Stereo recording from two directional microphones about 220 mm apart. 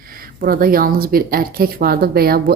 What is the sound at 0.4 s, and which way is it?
Speech, 40° right (ahead or behind).